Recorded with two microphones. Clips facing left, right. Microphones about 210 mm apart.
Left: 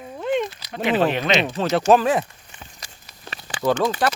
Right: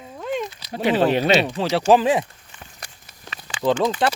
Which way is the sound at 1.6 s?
10° right (ahead or behind).